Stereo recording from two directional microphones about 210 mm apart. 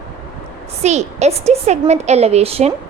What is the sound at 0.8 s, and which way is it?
A woman's voice, 30° right (ahead or behind).